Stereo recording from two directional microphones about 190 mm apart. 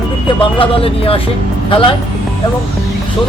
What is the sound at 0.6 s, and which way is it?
Speech, 30° left (ahead or behind).